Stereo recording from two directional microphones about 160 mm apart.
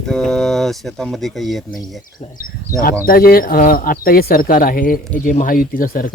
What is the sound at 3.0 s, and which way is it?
Speech, 70° left (ahead or behind).